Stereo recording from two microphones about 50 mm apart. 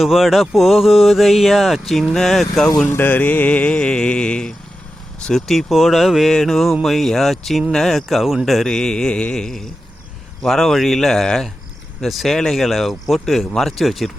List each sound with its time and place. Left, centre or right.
0.0 s speech: centre
2.9 s music: left; by 4.5 s centre
5.2 s speech: centre
8.7 s speech: centre